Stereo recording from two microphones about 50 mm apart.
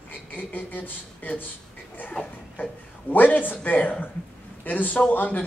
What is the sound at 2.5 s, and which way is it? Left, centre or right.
A man's voice, left.